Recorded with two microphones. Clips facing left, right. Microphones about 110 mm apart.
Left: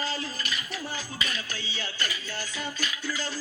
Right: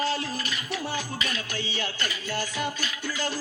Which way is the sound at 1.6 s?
60° right (ahead or behind).